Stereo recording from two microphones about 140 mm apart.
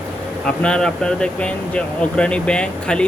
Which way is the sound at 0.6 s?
5° left (ahead or behind).